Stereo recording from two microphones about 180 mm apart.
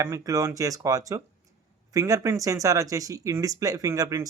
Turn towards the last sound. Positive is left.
turn(degrees=-20)  # may be behind; listen again after turning